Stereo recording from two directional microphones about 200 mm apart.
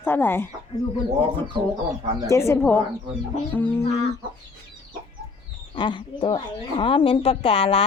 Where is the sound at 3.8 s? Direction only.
30° left (ahead or behind).